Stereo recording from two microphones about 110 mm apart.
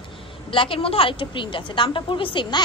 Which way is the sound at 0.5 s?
55° left (ahead or behind).